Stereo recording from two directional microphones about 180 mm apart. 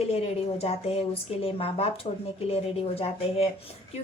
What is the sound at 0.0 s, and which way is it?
A woman's voice, 35° left (ahead or behind).